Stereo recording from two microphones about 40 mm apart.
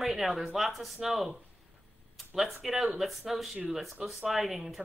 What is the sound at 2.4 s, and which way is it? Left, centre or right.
Speech, centre.